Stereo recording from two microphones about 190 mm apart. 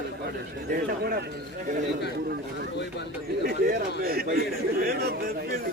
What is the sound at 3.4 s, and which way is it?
A man's voice, 50° right (ahead or behind).